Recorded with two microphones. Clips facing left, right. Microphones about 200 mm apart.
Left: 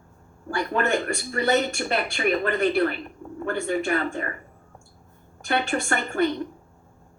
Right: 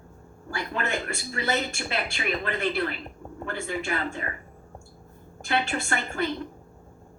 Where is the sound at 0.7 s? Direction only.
50° left (ahead or behind).